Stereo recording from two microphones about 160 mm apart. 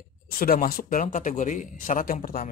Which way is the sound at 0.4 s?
65° left (ahead or behind).